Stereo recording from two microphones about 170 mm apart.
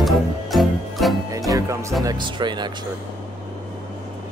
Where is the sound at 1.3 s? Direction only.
20° right (ahead or behind).